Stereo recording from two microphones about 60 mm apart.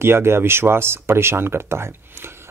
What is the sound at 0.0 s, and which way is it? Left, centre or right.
Speech, right.